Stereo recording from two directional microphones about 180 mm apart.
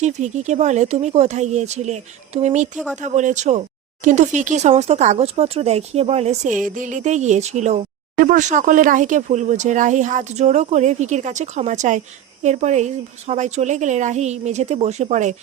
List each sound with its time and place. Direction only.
0.0 s speech: 40° right (ahead or behind)
2.7 s speech: 5° right (ahead or behind)
3.0 s speech: 45° right (ahead or behind)